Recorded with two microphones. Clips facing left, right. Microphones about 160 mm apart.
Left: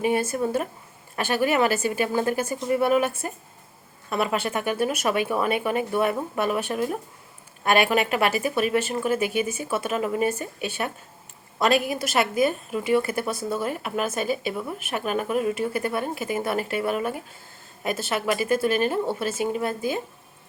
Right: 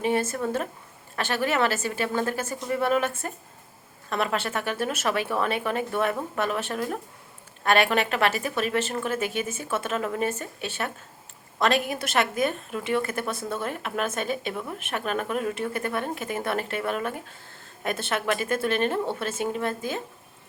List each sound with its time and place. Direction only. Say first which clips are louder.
0.0 s a woman's voice: left 2 dB; 10° left (ahead or behind)
4.1 s a woman's voice: left 2 dB; 10° left (ahead or behind)